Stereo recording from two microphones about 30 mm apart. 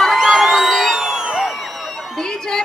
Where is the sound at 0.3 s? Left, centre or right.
Centre.